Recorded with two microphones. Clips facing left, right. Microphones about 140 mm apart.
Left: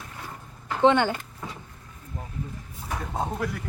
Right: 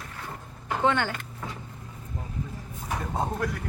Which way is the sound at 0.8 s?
20° left (ahead or behind).